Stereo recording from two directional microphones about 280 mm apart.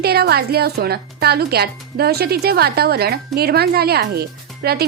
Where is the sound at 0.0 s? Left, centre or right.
Right.